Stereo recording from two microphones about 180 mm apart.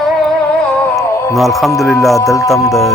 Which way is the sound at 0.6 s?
10° left (ahead or behind).